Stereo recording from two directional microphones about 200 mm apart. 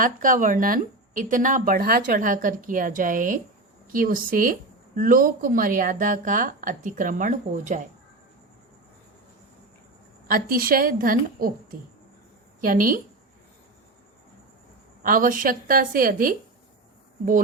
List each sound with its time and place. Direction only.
0.0 s a woman's voice: 40° right (ahead or behind)
10.2 s a woman's voice: 45° right (ahead or behind)
12.6 s a woman's voice: 45° right (ahead or behind)
15.0 s a woman's voice: 40° right (ahead or behind)